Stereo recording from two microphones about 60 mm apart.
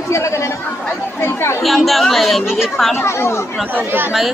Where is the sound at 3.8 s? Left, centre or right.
Right.